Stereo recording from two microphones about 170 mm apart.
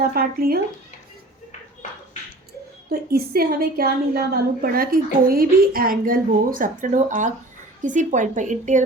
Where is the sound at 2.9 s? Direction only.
65° right (ahead or behind).